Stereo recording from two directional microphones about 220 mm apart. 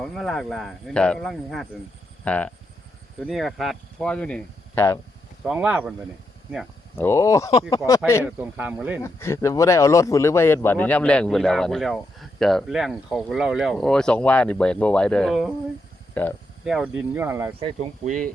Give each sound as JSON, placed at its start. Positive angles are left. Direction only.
{"t": 0.0, "sound": "speech", "side_deg": 0}
{"t": 5.4, "sound": "speech", "side_deg": -5}
{"t": 6.9, "sound": "speech", "side_deg": 10}
{"t": 8.2, "sound": "speech", "side_deg": -10}
{"t": 9.0, "sound": "speech", "side_deg": 10}
{"t": 16.6, "sound": "speech", "side_deg": -5}
{"t": 17.6, "sound": "speech", "side_deg": -35}